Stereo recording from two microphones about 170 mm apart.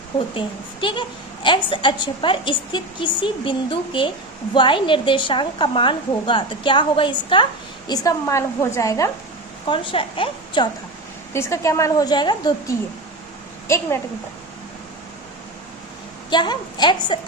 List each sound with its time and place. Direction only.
0.3 s a woman's voice: 30° left (ahead or behind)
9.6 s a woman's voice: 30° left (ahead or behind)
11.3 s a woman's voice: 15° left (ahead or behind)
16.3 s a woman's voice: 25° left (ahead or behind)